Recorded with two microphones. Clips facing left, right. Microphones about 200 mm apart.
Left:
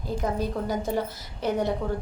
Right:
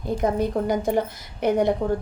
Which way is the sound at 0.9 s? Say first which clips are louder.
Right 5 dB; 55° right (ahead or behind).